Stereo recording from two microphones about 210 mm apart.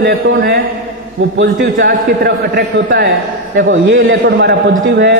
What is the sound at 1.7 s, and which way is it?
A man's voice, 50° right (ahead or behind).